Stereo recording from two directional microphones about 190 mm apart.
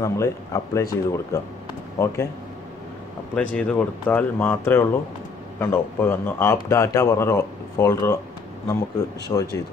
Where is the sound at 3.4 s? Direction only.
5° left (ahead or behind).